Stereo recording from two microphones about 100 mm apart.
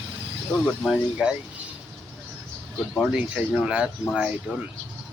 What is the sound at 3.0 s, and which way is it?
Speech, 5° right (ahead or behind).